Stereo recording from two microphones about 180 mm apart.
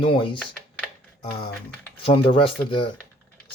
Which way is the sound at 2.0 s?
30° left (ahead or behind).